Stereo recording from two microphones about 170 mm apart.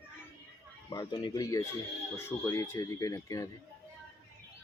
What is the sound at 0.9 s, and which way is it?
Speech, 25° left (ahead or behind).